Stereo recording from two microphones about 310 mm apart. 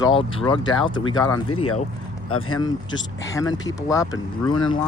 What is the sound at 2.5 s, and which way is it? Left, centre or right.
Speech, centre.